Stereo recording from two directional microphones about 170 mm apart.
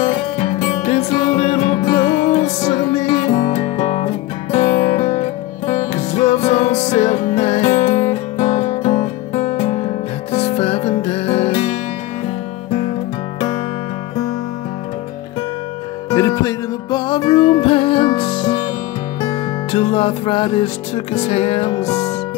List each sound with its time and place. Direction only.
0.0 s music: 40° left (ahead or behind)
16.1 s music: 20° left (ahead or behind)
19.7 s music: 35° left (ahead or behind)